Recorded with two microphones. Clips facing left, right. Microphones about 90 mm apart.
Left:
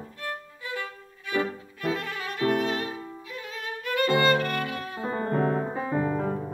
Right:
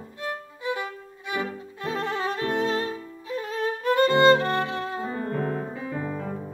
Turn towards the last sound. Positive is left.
turn(degrees=35)  # may be behind; listen again after turning